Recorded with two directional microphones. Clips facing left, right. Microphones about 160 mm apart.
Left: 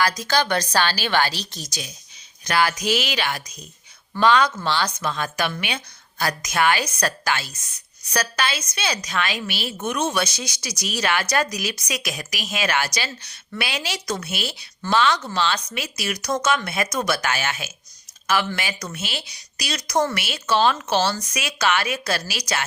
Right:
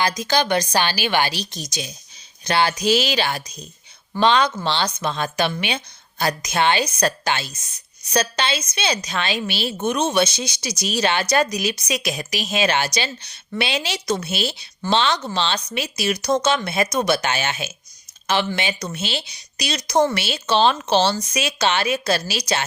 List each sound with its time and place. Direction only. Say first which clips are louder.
0.0 s a woman's voice: right 1 dB; 20° right (ahead or behind)